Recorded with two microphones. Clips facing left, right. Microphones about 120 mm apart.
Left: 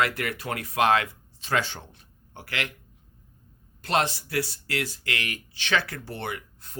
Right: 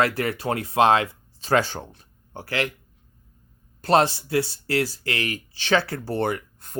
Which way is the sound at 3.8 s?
35° right (ahead or behind).